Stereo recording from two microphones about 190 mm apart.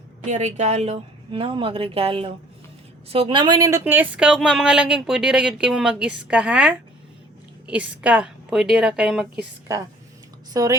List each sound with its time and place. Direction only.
0.3 s a woman's voice: 40° right (ahead or behind); by 9.7 s 5° right (ahead or behind)
10.5 s speech: 15° right (ahead or behind)